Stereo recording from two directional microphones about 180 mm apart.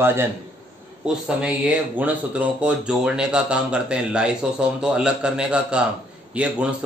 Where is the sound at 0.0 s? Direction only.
15° right (ahead or behind).